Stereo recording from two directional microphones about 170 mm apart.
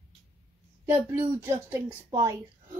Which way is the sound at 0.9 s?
15° right (ahead or behind).